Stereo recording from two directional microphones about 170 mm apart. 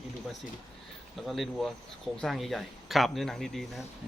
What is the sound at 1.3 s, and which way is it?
Speech, centre (ahead or behind).